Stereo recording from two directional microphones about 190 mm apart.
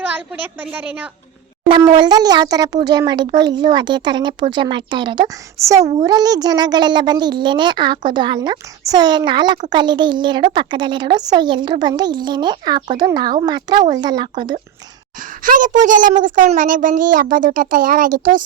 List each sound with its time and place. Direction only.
0.0 s a woman's voice: 10° right (ahead or behind)
1.9 s a child's voice: 20° right (ahead or behind)
15.4 s a woman's voice: 45° right (ahead or behind)